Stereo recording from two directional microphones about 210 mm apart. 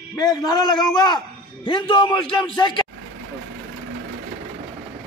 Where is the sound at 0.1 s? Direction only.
20° left (ahead or behind).